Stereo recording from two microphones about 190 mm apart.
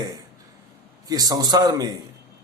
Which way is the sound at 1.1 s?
20° right (ahead or behind).